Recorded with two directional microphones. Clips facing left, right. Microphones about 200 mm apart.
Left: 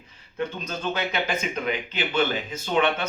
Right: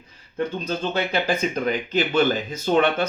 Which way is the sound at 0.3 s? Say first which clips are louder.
Right 4 dB; 30° right (ahead or behind).